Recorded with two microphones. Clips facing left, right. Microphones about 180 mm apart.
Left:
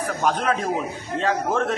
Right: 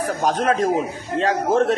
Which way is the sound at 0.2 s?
40° right (ahead or behind).